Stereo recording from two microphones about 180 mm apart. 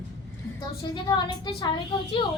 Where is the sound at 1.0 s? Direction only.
25° left (ahead or behind).